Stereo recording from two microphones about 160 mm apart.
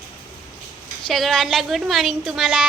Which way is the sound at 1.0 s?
Centre (ahead or behind).